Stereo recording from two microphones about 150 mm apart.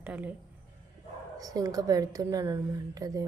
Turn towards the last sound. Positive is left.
turn(degrees=-25)  # may be behind; listen again after turning